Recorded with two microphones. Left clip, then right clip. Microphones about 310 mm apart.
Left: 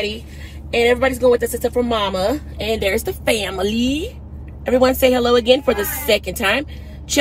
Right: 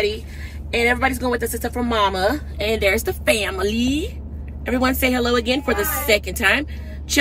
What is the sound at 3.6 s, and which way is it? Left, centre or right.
Speech, centre.